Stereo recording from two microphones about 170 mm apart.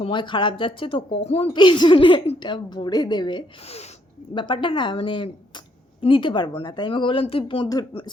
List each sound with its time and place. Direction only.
0.0 s a woman's voice: 30° left (ahead or behind)